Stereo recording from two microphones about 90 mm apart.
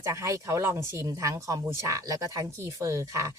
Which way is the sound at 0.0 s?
35° right (ahead or behind).